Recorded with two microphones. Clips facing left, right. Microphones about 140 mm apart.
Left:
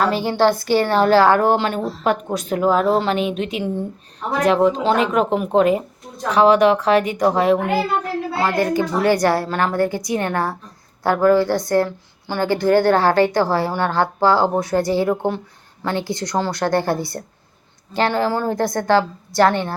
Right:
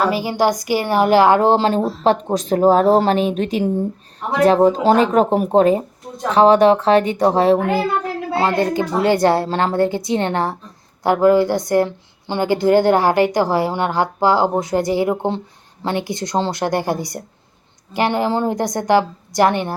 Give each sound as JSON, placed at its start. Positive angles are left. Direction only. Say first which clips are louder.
{"t": 0.0, "sound": "a woman's voice", "louder": "even", "side_deg": -5}